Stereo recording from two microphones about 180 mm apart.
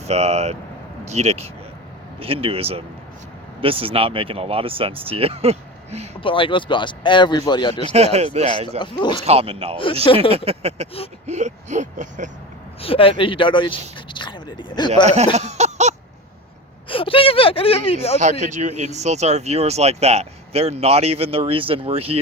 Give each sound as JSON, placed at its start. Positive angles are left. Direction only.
{"t": 0.0, "sound": "speech", "side_deg": -35}
{"t": 6.1, "sound": "speech", "side_deg": 30}
{"t": 7.9, "sound": "speech", "side_deg": -35}
{"t": 8.8, "sound": "speech", "side_deg": 25}
{"t": 9.2, "sound": "speech", "side_deg": -35}
{"t": 11.3, "sound": "whimper", "side_deg": -40}
{"t": 12.8, "sound": "speech", "side_deg": 30}
{"t": 15.0, "sound": "speech", "side_deg": -40}
{"t": 15.4, "sound": "a sound", "side_deg": -40}
{"t": 16.9, "sound": "speech", "side_deg": 30}
{"t": 18.2, "sound": "speech", "side_deg": -40}